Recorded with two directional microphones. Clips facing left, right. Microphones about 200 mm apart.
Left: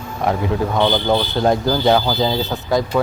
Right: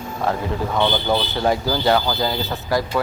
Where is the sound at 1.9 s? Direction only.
15° left (ahead or behind).